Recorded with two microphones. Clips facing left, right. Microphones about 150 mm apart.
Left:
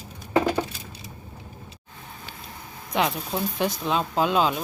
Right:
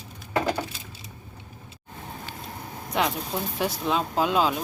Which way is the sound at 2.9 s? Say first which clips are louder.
Left 1 dB; 5° right (ahead or behind).